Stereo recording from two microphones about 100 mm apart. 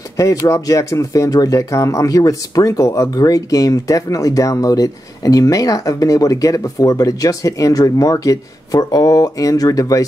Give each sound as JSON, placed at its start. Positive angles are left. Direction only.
{"t": 0.2, "sound": "speech", "side_deg": 35}